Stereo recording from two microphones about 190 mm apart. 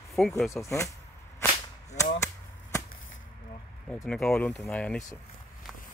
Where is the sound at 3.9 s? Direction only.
5° left (ahead or behind).